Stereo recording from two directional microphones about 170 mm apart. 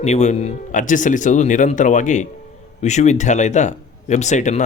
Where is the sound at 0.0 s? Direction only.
40° left (ahead or behind).